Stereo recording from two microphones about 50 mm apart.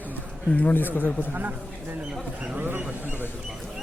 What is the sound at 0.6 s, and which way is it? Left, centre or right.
Speech, left.